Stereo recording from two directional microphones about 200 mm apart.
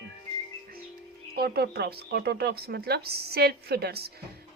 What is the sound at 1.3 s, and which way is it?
A woman's voice, 50° right (ahead or behind).